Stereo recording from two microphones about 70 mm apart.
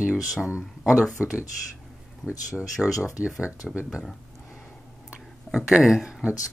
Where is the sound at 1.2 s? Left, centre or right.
Centre.